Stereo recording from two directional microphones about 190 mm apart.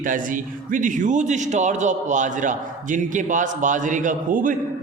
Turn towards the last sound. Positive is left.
turn(degrees=-45)  # may be behind; listen again after turning